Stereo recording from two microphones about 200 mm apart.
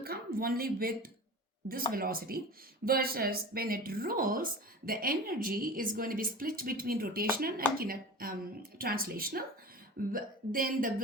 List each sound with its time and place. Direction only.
0.0 s speech: 50° right (ahead or behind)